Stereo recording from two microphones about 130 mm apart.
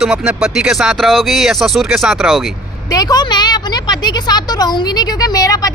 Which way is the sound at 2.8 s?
30° left (ahead or behind).